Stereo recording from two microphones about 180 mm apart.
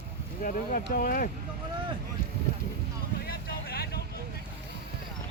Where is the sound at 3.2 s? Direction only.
60° left (ahead or behind).